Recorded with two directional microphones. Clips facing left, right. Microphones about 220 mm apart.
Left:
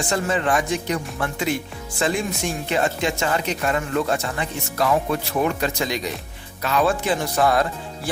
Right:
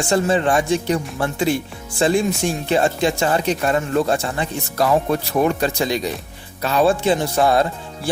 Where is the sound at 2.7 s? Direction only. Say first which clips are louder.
Right 4 dB; 35° right (ahead or behind).